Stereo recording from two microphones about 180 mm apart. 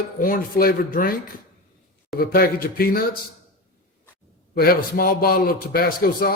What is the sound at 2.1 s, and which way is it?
Speech, 55° left (ahead or behind).